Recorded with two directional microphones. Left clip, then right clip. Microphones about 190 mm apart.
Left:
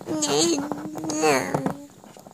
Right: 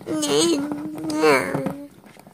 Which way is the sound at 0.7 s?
30° left (ahead or behind).